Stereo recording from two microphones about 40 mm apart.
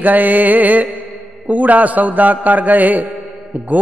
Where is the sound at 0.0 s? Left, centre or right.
Right.